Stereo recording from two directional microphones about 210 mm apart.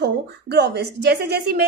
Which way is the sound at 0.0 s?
50° right (ahead or behind).